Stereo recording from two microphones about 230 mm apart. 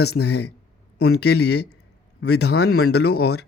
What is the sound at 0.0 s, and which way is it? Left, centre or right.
A man's voice, left.